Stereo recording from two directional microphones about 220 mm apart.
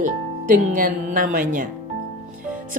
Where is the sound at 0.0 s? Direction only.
35° right (ahead or behind).